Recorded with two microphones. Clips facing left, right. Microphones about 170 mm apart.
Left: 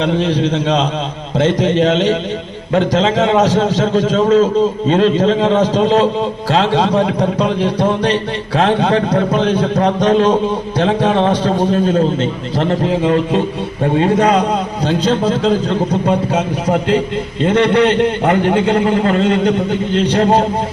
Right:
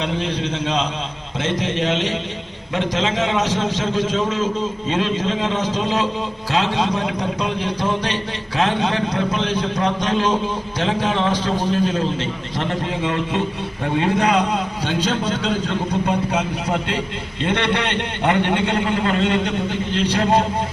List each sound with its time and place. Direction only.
0.0 s a man's voice: 35° left (ahead or behind)
8.5 s a man's voice: 45° left (ahead or behind)